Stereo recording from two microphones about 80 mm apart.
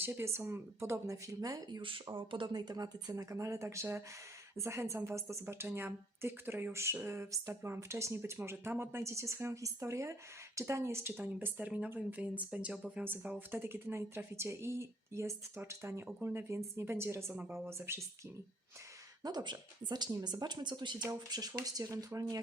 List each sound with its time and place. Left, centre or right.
0.0 s a woman's voice: right
2.0 s speech: right
2.5 s a woman's voice: right
11.1 s a woman's voice: right
19.2 s speech: right
21.2 s speech: right